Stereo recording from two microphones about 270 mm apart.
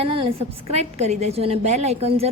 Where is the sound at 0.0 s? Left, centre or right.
Centre.